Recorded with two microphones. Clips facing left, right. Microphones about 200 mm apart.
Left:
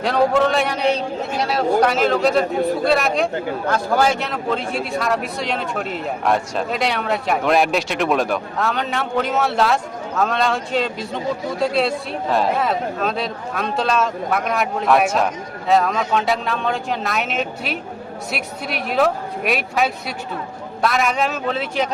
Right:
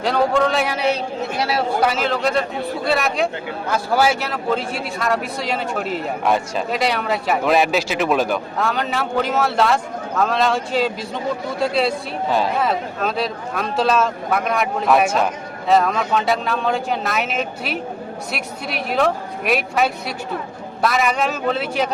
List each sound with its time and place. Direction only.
0.0 s a man's voice: centre (ahead or behind)